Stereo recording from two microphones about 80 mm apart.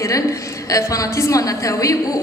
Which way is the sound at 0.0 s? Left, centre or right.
Left.